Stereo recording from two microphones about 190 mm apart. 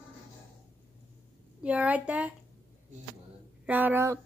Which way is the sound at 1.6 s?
10° right (ahead or behind).